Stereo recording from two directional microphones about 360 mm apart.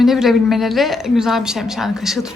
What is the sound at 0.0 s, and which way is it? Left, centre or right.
Speech, centre.